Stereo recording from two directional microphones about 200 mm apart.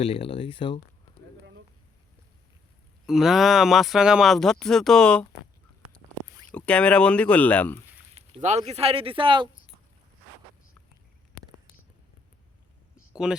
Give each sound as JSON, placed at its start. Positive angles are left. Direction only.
{"t": 0.0, "sound": "speech", "side_deg": 30}
{"t": 3.1, "sound": "speech", "side_deg": 0}
{"t": 6.5, "sound": "speech", "side_deg": 5}
{"t": 8.1, "sound": "speech", "side_deg": -35}
{"t": 13.2, "sound": "speech", "side_deg": -5}